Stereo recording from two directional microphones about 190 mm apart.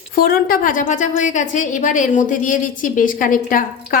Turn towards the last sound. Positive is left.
turn(degrees=45)  # may be behind; listen again after turning